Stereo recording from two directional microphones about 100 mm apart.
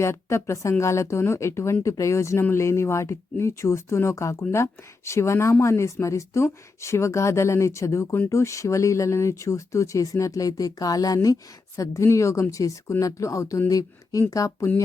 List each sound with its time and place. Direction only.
0.0 s speech: 25° left (ahead or behind)